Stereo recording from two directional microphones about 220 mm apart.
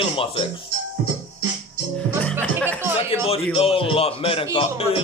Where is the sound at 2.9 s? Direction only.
25° left (ahead or behind).